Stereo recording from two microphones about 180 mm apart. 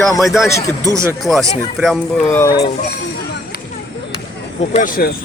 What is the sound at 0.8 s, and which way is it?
Speech, 15° right (ahead or behind).